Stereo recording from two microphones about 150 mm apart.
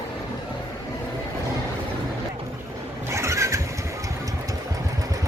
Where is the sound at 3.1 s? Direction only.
20° right (ahead or behind).